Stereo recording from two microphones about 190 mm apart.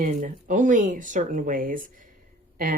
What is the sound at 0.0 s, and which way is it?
Speech, 45° right (ahead or behind).